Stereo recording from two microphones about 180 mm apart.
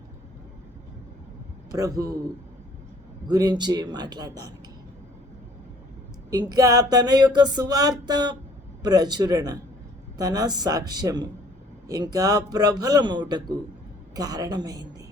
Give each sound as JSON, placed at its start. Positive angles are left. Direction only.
{"t": 1.8, "sound": "music", "side_deg": -20}
{"t": 3.2, "sound": "music", "side_deg": -20}
{"t": 6.5, "sound": "music", "side_deg": -20}